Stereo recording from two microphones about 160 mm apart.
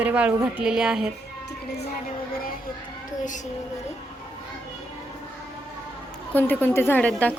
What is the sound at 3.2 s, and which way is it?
Speech, 50° left (ahead or behind).